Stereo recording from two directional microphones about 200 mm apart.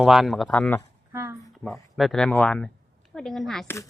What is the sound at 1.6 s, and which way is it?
Speech, centre (ahead or behind).